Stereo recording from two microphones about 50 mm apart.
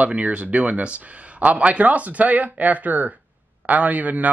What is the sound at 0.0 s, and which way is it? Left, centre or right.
Speech, right.